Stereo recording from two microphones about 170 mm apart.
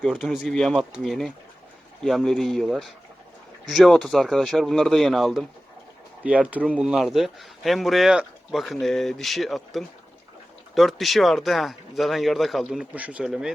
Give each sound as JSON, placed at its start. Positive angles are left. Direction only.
{"t": 0.0, "sound": "speech", "side_deg": 0}